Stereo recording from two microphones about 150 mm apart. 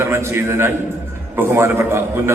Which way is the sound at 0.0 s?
15° right (ahead or behind).